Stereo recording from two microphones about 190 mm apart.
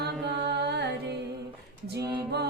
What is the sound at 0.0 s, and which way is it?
Music, 60° right (ahead or behind).